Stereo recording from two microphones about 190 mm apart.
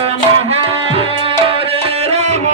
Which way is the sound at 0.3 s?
30° right (ahead or behind).